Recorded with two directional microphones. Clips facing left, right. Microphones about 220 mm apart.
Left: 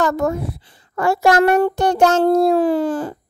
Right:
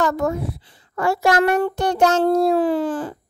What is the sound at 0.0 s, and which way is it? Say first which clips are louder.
A child's voice: left 2 dB; 45° left (ahead or behind).